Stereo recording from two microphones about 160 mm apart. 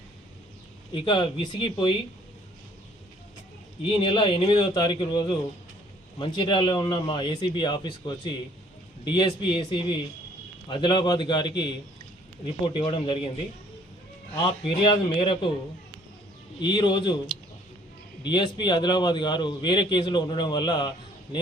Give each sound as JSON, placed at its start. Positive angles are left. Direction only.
{"t": 0.9, "sound": "speech", "side_deg": 30}
{"t": 3.8, "sound": "a man's voice", "side_deg": 30}
{"t": 14.8, "sound": "speech", "side_deg": 30}
{"t": 16.6, "sound": "a man's voice", "side_deg": 30}
{"t": 18.3, "sound": "a man's voice", "side_deg": 30}